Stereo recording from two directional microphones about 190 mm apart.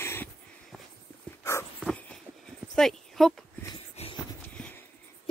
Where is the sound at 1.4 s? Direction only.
15° left (ahead or behind).